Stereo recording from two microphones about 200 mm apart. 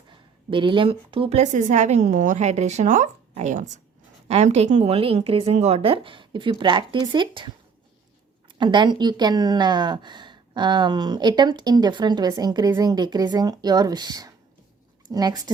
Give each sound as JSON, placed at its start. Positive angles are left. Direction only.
{"t": 0.1, "sound": "a woman's voice", "side_deg": -25}
{"t": 8.5, "sound": "a woman's voice", "side_deg": -25}